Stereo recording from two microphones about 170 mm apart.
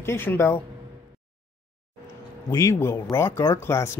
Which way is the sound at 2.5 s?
20° left (ahead or behind).